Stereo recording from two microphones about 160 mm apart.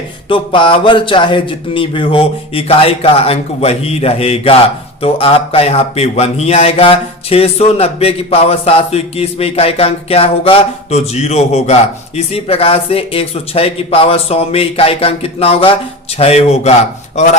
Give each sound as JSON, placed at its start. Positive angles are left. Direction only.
{"t": 0.3, "sound": "speech", "side_deg": 30}